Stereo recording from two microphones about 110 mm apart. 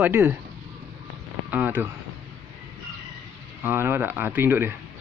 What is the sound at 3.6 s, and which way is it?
Speech, 20° right (ahead or behind).